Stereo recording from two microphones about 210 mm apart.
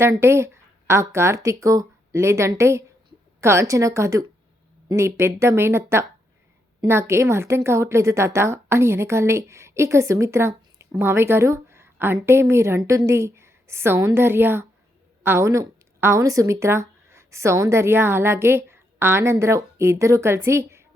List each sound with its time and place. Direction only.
0.0 s a woman's voice: 10° right (ahead or behind)